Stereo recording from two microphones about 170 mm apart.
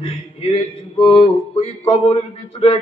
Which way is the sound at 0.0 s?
35° left (ahead or behind).